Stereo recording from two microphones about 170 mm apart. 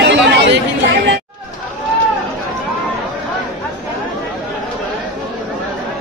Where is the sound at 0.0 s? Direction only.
90° right.